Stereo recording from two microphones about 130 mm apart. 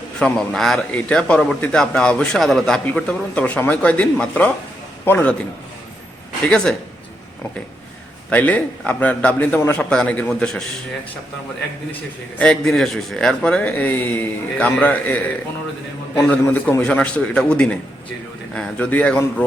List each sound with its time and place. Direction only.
0.2 s a man's voice: 5° left (ahead or behind)
8.3 s a man's voice: 10° left (ahead or behind)
12.4 s a man's voice: 5° left (ahead or behind)
16.3 s a man's voice: 15° left (ahead or behind)